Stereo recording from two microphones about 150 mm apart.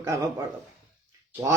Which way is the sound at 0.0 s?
20° right (ahead or behind).